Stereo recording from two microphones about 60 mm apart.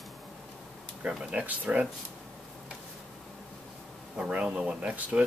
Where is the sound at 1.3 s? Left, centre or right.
Right.